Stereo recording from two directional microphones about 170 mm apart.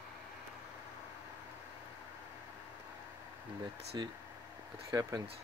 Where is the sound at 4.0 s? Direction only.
25° right (ahead or behind).